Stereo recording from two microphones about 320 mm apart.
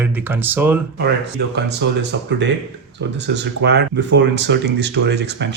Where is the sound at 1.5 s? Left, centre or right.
Right.